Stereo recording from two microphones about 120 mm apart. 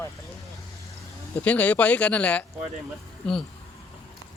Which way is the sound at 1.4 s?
10° left (ahead or behind).